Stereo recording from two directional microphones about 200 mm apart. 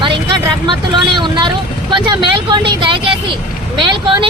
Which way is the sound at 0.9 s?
25° right (ahead or behind).